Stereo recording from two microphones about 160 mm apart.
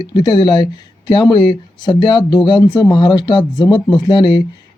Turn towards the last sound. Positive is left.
turn(degrees=30)  # may be behind; listen again after turning